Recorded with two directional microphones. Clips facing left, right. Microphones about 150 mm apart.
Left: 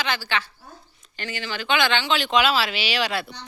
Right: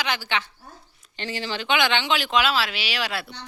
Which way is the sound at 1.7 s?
15° right (ahead or behind).